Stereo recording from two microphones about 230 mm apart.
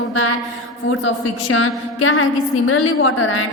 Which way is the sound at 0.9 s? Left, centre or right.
Left.